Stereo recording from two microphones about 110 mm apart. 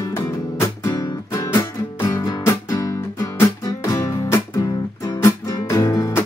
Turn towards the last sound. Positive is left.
turn(degrees=30)  # may be behind; listen again after turning